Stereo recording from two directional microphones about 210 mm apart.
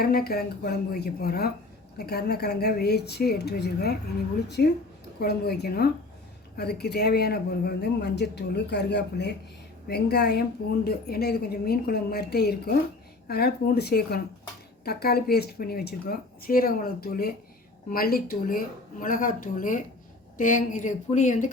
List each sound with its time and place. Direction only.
0.0 s speech: 45° left (ahead or behind)